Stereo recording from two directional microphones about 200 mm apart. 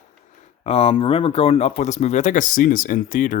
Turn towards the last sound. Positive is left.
turn(degrees=40)  # may be behind; listen again after turning